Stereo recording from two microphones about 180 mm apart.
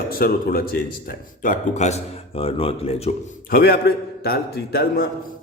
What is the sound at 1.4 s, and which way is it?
A man's voice, 45° left (ahead or behind).